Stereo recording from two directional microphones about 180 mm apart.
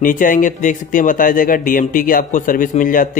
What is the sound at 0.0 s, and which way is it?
Speech, 50° left (ahead or behind).